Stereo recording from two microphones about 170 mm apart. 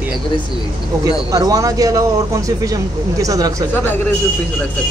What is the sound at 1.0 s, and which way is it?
Speech, 20° right (ahead or behind).